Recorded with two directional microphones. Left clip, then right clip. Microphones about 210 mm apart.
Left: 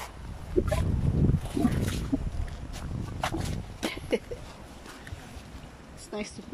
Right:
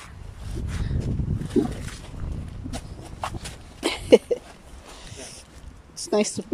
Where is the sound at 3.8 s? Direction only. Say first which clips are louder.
Right 14 dB; 45° right (ahead or behind).